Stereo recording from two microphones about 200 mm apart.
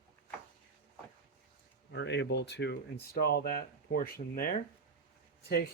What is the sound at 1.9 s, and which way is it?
Speech, 60° left (ahead or behind).